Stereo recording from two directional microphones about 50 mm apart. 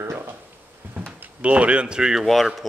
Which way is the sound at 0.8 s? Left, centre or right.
Right.